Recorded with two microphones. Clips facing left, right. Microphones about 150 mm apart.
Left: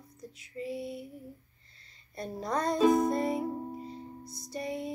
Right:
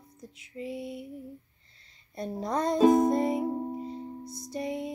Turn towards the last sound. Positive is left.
turn(degrees=-20)  # may be behind; listen again after turning